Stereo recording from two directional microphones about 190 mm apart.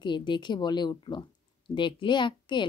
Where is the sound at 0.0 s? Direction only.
25° left (ahead or behind).